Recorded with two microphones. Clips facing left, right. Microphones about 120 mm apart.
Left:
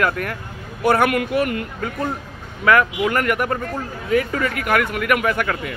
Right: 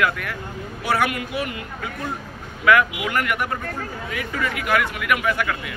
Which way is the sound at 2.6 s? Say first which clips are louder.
Left 2 dB; 40° left (ahead or behind).